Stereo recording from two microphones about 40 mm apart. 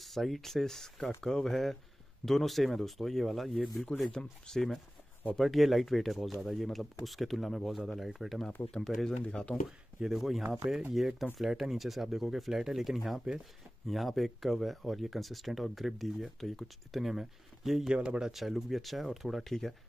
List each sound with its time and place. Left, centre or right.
0.0 s speech: centre
4.1 s speech: centre
5.4 s speech: centre
8.8 s speech: centre
9.2 s speech: left
10.0 s speech: centre
17.1 s speech: centre
17.8 s speech: right
18.3 s speech: centre